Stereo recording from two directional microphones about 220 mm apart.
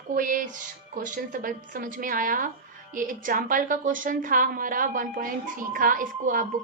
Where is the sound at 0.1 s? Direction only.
40° right (ahead or behind).